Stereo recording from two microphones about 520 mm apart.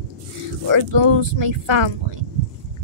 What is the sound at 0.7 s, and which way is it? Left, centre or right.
A woman's voice, right.